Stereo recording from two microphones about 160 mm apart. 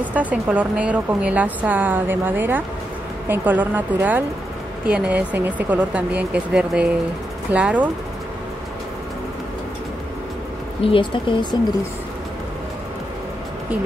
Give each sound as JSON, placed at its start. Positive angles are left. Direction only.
{"t": 0.0, "sound": "a woman's voice", "side_deg": -10}
{"t": 10.8, "sound": "speech", "side_deg": 35}